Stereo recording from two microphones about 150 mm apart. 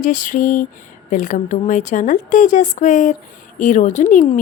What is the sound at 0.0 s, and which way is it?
A woman's voice, 60° left (ahead or behind).